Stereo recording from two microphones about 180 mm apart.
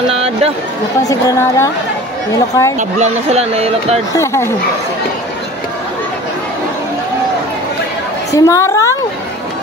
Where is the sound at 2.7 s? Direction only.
40° right (ahead or behind).